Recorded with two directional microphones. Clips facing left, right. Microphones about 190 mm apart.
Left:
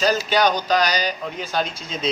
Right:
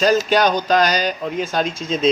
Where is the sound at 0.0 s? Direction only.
50° right (ahead or behind).